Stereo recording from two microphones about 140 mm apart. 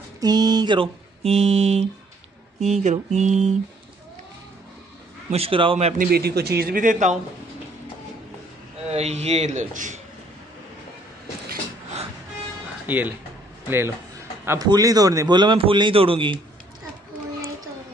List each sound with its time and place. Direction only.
0.2 s a man's voice: 30° right (ahead or behind); by 1.9 s 45° right (ahead or behind)
2.6 s mantra: 55° right (ahead or behind)
5.3 s speech: 40° right (ahead or behind)
5.9 s a man's voice: 90° right; by 7.2 s 65° right (ahead or behind)
8.9 s speech: 50° right (ahead or behind)
12.8 s a man's voice: 10° right (ahead or behind); by 16.3 s 40° right (ahead or behind)